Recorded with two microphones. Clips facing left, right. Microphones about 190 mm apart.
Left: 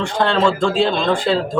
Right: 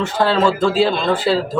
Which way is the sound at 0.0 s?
5° right (ahead or behind).